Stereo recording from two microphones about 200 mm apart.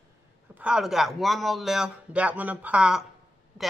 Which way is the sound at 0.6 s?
5° right (ahead or behind).